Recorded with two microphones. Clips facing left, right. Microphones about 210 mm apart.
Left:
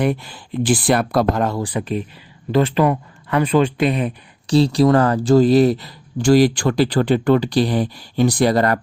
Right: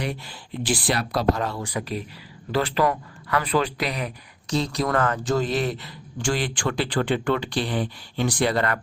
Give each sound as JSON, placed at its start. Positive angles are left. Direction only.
{"t": 0.0, "sound": "speech", "side_deg": 55}
{"t": 1.6, "sound": "speech", "side_deg": 30}
{"t": 2.5, "sound": "speech", "side_deg": 20}